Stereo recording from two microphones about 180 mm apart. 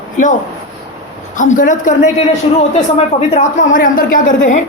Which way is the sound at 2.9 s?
40° left (ahead or behind).